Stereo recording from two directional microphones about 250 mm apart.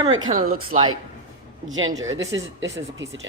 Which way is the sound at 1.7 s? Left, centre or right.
Right.